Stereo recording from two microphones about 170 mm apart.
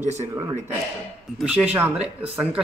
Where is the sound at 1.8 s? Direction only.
5° right (ahead or behind).